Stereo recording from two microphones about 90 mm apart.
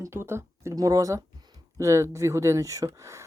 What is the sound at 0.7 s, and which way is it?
Speech, 40° right (ahead or behind).